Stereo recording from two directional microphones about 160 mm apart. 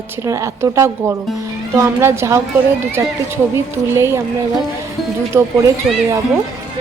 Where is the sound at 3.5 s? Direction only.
15° right (ahead or behind).